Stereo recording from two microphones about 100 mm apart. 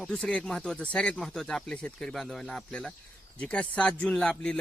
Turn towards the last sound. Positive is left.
turn(degrees=10)  # may be behind; listen again after turning